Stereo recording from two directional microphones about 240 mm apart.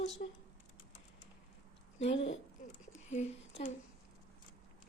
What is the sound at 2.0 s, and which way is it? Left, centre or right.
Speech, left.